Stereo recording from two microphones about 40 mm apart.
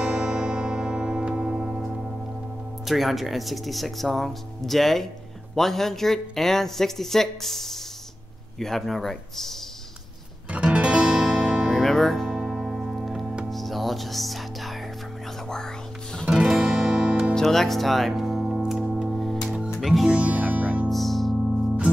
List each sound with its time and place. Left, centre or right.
0.0 s music: right
2.8 s speech: centre
10.5 s music: right
11.1 s music: centre
12.3 s music: centre
13.5 s music: centre
15.4 s music: centre
16.3 s guitar: centre
17.3 s speech: centre
18.4 s music: centre
20.1 s speech: right
20.4 s music: right
20.9 s music: centre